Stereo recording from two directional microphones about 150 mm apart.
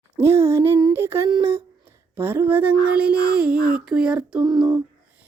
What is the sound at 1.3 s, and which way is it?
Speech, 35° right (ahead or behind).